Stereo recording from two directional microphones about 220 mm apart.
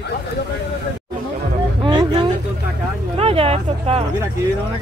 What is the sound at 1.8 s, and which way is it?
Vehicle, 20° right (ahead or behind).